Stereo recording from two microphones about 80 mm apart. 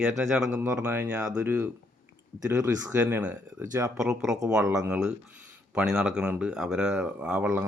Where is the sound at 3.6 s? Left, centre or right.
Right.